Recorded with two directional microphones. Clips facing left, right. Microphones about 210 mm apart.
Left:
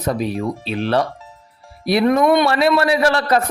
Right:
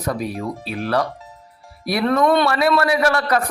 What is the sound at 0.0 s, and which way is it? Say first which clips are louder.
A man's voice: left 3 dB; 25° left (ahead or behind).